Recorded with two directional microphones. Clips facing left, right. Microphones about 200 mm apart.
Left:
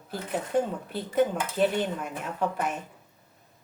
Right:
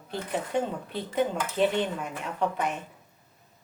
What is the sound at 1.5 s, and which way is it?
Speech, 5° left (ahead or behind).